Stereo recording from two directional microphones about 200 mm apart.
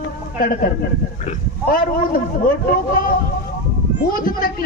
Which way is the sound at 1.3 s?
45° left (ahead or behind).